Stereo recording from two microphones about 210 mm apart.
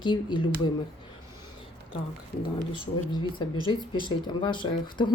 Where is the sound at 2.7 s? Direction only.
25° left (ahead or behind).